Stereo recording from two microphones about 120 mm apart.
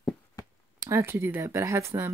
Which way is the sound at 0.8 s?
20° right (ahead or behind).